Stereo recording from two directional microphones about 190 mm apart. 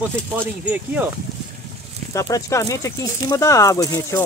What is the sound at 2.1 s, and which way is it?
Speech, 15° left (ahead or behind).